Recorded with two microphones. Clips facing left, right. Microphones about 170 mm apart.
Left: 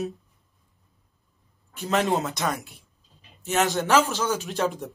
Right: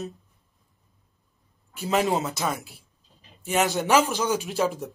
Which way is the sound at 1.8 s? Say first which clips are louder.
Even; centre (ahead or behind).